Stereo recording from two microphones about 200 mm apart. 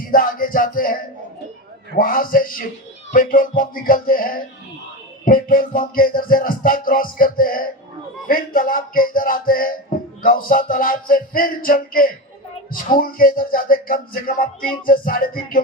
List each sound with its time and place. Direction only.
0.0 s music: 45° left (ahead or behind)